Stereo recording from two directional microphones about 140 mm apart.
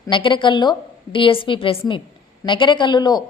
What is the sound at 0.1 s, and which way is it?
A woman's voice, 35° left (ahead or behind).